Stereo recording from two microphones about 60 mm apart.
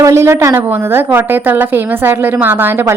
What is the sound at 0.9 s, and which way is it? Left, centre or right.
A woman's voice, right.